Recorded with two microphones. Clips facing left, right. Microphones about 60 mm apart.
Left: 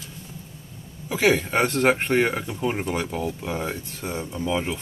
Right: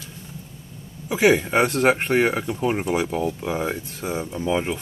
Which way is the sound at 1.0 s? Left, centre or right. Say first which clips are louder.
Right 3 dB; centre.